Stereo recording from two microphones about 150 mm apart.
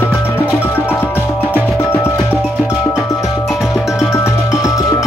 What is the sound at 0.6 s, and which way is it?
Music, 10° left (ahead or behind).